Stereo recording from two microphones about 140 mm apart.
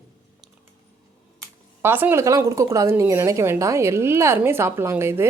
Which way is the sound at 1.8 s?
15° right (ahead or behind).